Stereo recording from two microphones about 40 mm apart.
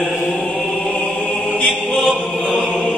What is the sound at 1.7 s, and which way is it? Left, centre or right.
Choir, centre.